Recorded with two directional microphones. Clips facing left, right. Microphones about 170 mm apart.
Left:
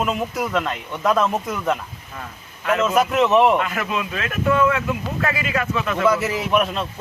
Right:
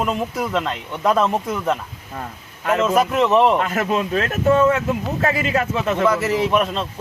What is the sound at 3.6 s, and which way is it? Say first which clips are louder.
Speech: right 4 dB; 40° right (ahead or behind).